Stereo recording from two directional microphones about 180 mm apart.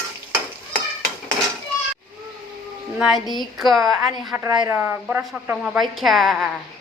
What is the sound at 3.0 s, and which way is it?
A woman's voice, 5° right (ahead or behind).